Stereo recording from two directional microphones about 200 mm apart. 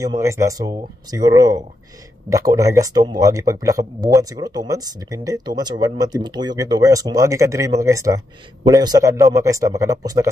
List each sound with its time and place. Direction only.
0.2 s speech: 15° right (ahead or behind)